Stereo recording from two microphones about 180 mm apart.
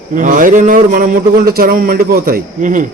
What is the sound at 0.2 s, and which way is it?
A man's voice, 45° right (ahead or behind).